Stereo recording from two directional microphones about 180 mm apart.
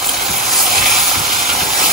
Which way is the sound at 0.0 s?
Centre (ahead or behind).